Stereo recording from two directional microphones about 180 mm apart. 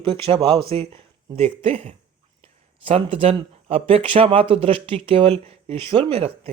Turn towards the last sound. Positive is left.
turn(degrees=-35)  # may be behind; listen again after turning